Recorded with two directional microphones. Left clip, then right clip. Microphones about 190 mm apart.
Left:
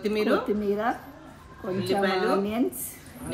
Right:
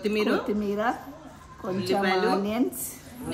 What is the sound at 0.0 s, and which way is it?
A woman's voice, 5° left (ahead or behind).